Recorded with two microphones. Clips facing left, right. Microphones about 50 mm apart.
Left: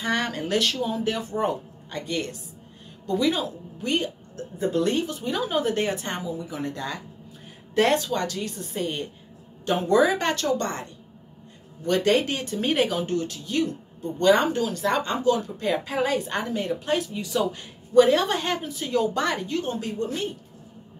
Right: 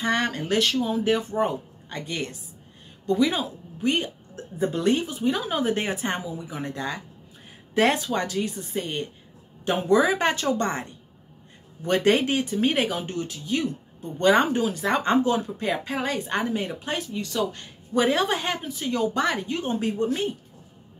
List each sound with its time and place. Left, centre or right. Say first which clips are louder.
0.0 s a woman's voice: right 1 dB; centre
14.3 s speech: even; centre
15.0 s speech: right 2 dB; right
15.6 s speech: left 2 dB; centre
16.9 s speech: left 3 dB; centre
17.9 s speech: left 4 dB; centre
19.5 s speech: right 1 dB; right